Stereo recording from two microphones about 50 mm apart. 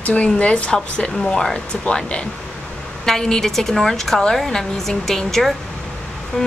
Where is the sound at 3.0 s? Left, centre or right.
Centre.